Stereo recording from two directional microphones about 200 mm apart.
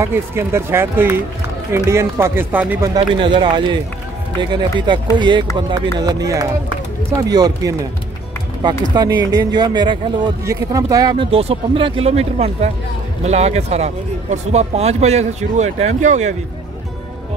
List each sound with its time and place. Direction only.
0.0 s speech: 10° right (ahead or behind)
2.9 s speech: 25° right (ahead or behind)
8.9 s speech: 20° right (ahead or behind); by 16.3 s 35° right (ahead or behind)